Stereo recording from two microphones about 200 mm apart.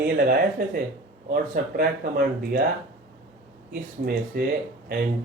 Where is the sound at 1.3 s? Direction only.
45° right (ahead or behind).